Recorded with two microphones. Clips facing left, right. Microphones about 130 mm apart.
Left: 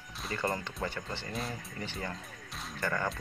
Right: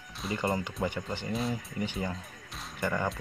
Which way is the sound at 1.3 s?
Centre (ahead or behind).